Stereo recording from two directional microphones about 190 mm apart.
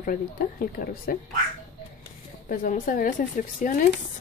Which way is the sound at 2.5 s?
45° left (ahead or behind).